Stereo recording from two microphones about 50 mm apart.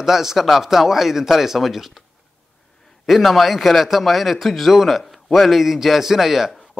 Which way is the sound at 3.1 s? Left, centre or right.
Centre.